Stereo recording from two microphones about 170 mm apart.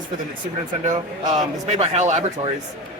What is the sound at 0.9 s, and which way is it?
A man's voice, 45° right (ahead or behind).